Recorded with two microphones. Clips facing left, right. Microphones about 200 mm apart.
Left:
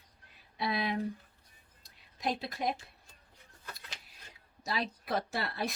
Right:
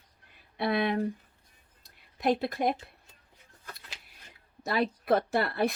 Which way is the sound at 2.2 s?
55° right (ahead or behind).